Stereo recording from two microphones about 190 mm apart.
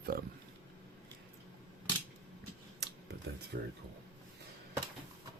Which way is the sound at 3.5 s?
55° right (ahead or behind).